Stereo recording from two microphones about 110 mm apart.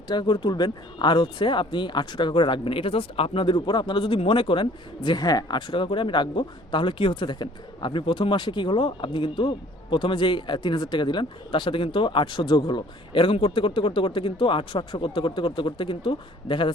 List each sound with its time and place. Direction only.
0.1 s speech: 45° left (ahead or behind)